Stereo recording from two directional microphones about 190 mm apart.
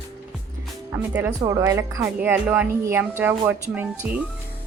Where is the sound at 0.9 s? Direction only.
10° right (ahead or behind).